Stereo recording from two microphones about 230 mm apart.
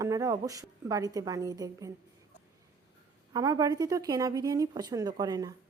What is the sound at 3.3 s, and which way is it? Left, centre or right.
A woman's voice, centre.